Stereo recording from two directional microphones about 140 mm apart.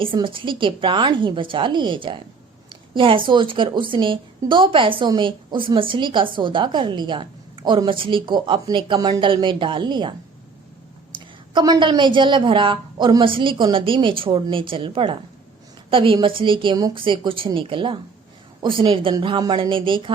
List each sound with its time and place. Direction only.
0.0 s a woman's voice: 35° right (ahead or behind)